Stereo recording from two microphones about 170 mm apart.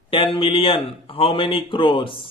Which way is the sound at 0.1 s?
30° left (ahead or behind).